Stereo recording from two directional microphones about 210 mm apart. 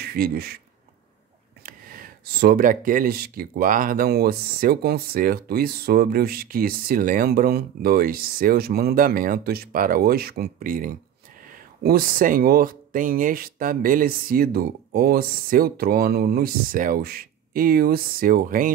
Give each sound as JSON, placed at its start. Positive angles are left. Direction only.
{"t": 0.0, "sound": "speech", "side_deg": -45}
{"t": 1.6, "sound": "speech", "side_deg": -40}